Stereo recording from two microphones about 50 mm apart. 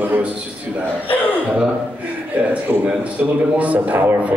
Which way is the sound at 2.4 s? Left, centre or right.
Right.